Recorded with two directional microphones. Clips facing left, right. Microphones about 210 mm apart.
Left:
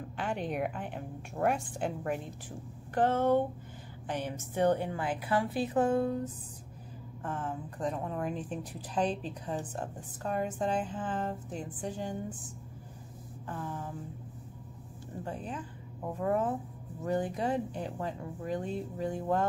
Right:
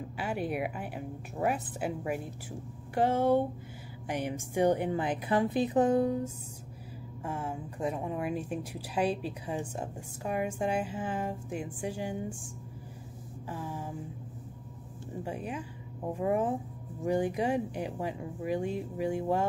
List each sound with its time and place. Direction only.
0.2 s speech: 5° right (ahead or behind)
13.5 s speech: 10° right (ahead or behind)
15.2 s speech: 10° right (ahead or behind)